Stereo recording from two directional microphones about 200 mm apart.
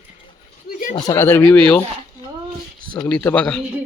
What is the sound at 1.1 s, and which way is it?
Speech, 10° left (ahead or behind).